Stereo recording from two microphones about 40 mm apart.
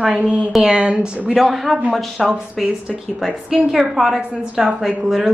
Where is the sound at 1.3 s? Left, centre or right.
Centre.